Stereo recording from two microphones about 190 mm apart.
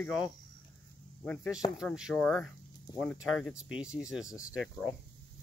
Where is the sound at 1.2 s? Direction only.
5° left (ahead or behind).